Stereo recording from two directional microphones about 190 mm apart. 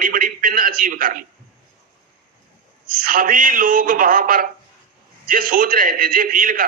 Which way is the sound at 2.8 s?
50° right (ahead or behind).